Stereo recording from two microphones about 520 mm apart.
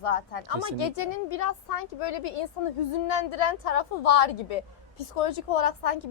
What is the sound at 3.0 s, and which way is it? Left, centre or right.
Speech, left.